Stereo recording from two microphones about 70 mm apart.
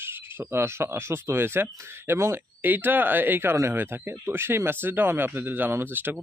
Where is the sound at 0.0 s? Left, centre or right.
Right.